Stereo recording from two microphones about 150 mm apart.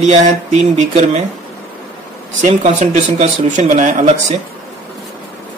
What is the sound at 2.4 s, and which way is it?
Speech, 55° right (ahead or behind).